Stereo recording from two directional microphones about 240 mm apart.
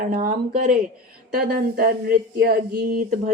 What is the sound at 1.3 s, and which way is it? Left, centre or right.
Speech, right.